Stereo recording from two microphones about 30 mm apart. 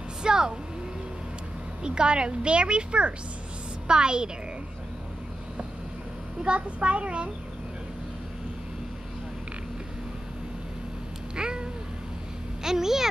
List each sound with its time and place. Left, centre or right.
0.2 s vehicle: right
1.8 s a woman's voice: right
6.4 s a woman's voice: right
11.3 s cat: right
12.6 s speech: centre